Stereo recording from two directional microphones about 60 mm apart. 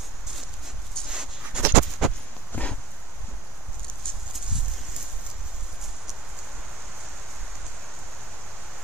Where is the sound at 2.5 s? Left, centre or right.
Left.